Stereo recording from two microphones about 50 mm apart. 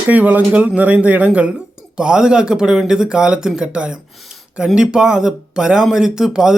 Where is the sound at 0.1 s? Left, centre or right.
Right.